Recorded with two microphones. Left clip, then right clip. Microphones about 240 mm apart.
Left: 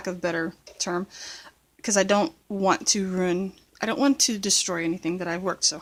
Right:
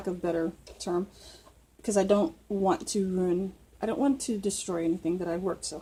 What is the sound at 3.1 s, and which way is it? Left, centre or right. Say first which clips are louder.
Speech: left 3 dB; left.